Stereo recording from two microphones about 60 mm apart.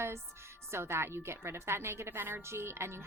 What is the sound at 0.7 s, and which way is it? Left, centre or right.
A woman's voice, right.